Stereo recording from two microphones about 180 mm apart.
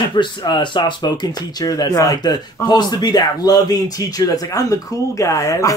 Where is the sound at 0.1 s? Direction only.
25° left (ahead or behind).